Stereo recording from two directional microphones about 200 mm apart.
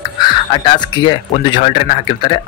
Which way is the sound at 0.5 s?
20° left (ahead or behind).